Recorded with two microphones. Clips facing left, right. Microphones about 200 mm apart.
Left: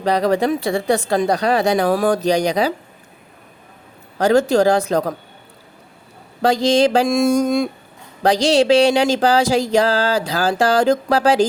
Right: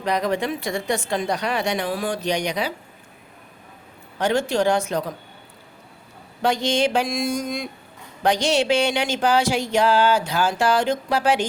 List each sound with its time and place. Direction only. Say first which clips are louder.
0.0 s speech: left 6 dB; 35° left (ahead or behind)
4.2 s speech: left 7 dB; 40° left (ahead or behind)
6.4 s speech: left 6 dB; 35° left (ahead or behind)
8.2 s speech: left 5 dB; 35° left (ahead or behind)